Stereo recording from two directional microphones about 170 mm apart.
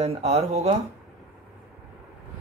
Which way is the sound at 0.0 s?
40° right (ahead or behind).